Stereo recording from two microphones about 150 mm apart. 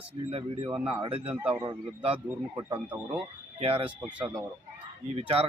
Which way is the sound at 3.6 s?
40° right (ahead or behind).